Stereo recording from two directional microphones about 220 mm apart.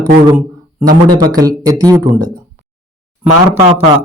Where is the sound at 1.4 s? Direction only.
15° right (ahead or behind).